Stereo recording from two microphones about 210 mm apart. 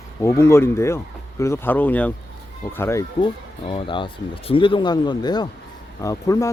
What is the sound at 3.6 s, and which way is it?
Speech, 25° left (ahead or behind).